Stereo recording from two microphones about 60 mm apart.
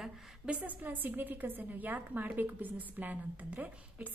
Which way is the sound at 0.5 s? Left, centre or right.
Right.